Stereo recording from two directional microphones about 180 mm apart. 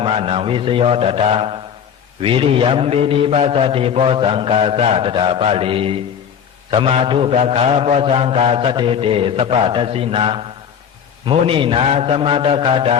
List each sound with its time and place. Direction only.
0.0 s a man's voice: 30° right (ahead or behind)